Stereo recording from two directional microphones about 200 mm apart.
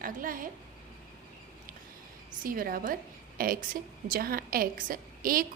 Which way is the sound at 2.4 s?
45° right (ahead or behind).